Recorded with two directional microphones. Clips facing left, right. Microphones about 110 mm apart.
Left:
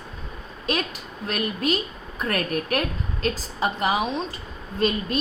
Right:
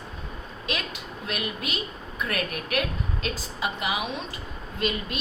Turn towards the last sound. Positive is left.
turn(degrees=40)  # may be behind; listen again after turning